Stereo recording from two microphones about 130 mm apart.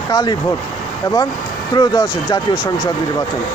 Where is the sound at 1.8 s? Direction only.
35° left (ahead or behind).